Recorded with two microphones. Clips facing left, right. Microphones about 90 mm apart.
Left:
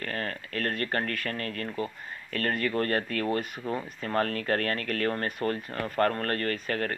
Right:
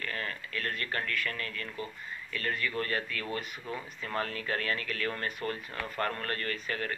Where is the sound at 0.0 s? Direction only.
45° left (ahead or behind).